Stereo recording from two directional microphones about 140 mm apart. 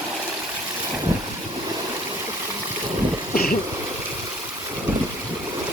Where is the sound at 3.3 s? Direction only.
90° left.